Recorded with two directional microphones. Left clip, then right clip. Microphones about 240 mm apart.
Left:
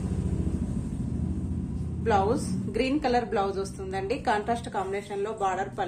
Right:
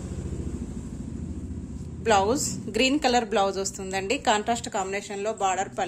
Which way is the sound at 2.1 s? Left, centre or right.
Right.